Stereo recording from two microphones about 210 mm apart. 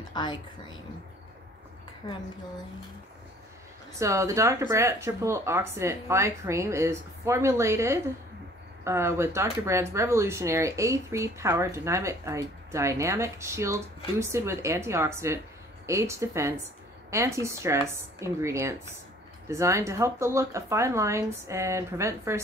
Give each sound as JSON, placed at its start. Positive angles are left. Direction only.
{"t": 0.1, "sound": "a woman's voice", "side_deg": 20}
{"t": 4.0, "sound": "speech", "side_deg": -15}